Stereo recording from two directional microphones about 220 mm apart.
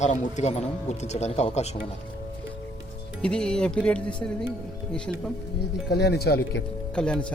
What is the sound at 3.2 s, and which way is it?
Speech, 5° left (ahead or behind).